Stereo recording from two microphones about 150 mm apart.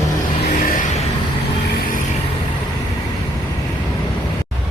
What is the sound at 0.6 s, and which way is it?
Vehicle, 65° left (ahead or behind).